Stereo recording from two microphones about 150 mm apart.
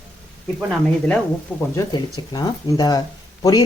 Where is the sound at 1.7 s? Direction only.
25° left (ahead or behind).